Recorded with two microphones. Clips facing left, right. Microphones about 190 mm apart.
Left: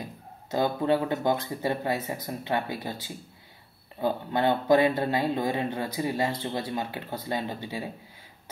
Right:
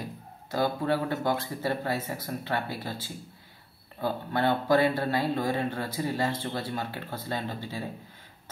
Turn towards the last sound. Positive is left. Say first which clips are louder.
# left 1 dB
turn(degrees=15)  # may be behind; listen again after turning